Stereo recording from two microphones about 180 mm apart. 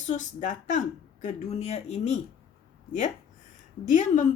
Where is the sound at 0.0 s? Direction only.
45° left (ahead or behind).